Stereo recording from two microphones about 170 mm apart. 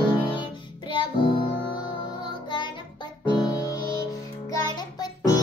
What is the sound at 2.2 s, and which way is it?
Music, 25° left (ahead or behind).